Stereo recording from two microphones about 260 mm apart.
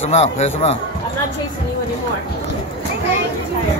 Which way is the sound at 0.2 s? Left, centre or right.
Left.